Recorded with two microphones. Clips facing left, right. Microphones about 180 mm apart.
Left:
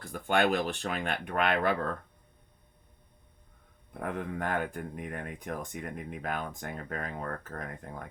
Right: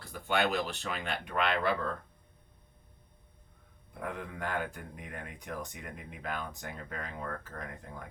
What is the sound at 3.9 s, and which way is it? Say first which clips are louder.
Speech: left 5 dB; 50° left (ahead or behind).